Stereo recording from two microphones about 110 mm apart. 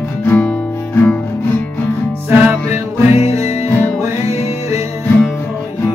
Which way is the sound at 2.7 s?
70° left (ahead or behind).